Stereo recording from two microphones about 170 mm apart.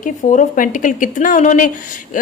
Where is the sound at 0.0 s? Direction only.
50° left (ahead or behind).